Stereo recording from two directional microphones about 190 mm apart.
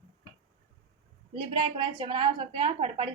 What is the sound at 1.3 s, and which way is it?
A woman's voice, 25° right (ahead or behind).